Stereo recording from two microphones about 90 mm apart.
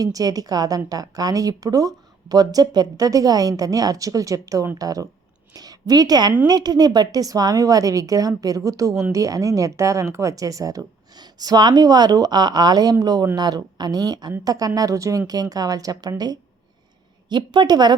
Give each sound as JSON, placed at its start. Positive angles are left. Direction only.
{"t": 0.0, "sound": "a woman's voice", "side_deg": -45}